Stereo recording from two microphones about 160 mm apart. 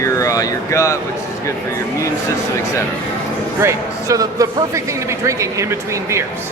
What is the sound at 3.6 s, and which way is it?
A man's voice, 20° right (ahead or behind).